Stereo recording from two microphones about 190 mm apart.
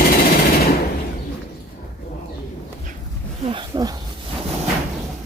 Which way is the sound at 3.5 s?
25° right (ahead or behind).